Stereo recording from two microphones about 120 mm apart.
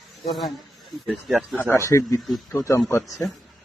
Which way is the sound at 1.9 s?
25° left (ahead or behind).